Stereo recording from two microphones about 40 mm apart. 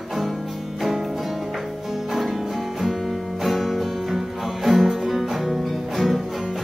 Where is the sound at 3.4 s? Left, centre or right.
Centre.